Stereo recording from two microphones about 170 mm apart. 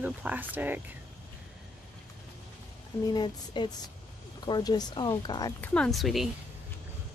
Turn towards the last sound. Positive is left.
turn(degrees=0)  # may be behind; listen again after turning